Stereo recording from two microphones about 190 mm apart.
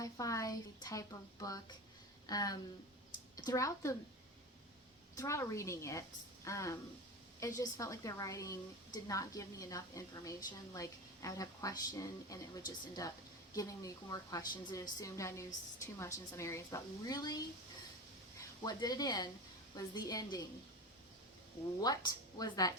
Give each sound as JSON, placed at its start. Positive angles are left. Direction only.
{"t": 0.0, "sound": "a woman's voice", "side_deg": 15}
{"t": 5.1, "sound": "a woman's voice", "side_deg": 15}
{"t": 13.5, "sound": "a woman's voice", "side_deg": 15}
{"t": 18.6, "sound": "a woman's voice", "side_deg": 20}
{"t": 21.8, "sound": "a woman's voice", "side_deg": 20}